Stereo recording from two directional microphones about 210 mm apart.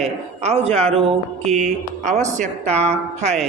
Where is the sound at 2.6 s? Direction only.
5° left (ahead or behind).